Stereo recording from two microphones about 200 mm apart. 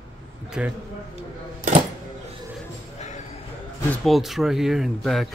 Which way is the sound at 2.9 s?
35° left (ahead or behind).